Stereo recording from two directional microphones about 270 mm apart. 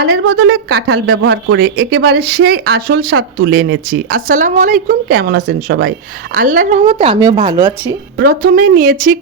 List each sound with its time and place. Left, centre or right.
0.0 s speech: right; by 7.7 s centre
8.1 s speech: right